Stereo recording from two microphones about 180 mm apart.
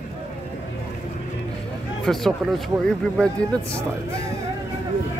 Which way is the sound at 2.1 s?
Centre (ahead or behind).